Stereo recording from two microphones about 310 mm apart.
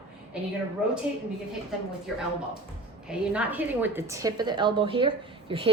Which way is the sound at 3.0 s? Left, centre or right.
Centre.